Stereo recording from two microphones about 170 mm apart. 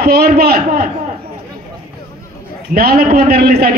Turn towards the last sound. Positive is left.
turn(degrees=-65)  # may be behind; listen again after turning